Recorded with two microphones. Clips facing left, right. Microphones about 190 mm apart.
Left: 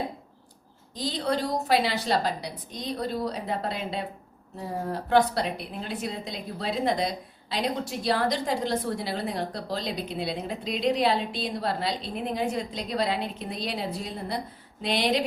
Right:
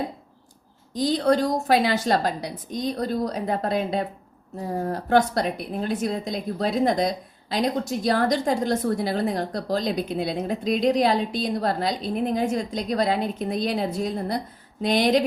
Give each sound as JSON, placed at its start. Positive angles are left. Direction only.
{"t": 0.9, "sound": "a woman's voice", "side_deg": -45}